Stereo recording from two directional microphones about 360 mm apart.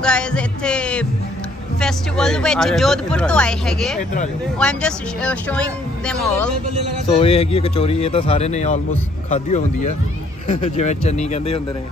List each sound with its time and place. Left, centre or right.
0.0 s speech: centre
7.1 s speech: centre
10.4 s speech: centre